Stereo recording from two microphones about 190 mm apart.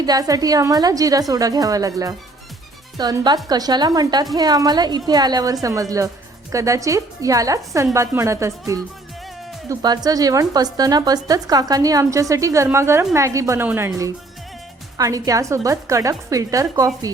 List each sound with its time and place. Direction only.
0.0 s a woman's voice: 20° right (ahead or behind)